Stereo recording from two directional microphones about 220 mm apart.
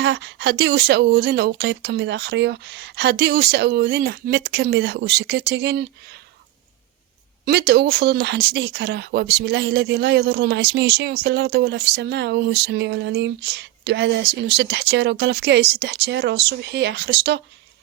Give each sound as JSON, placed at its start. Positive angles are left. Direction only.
{"t": 0.0, "sound": "speech", "side_deg": -50}
{"t": 7.4, "sound": "speech", "side_deg": -45}